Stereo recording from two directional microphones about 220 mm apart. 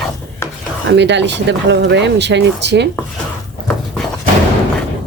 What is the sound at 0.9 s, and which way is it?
Speech, 55° right (ahead or behind).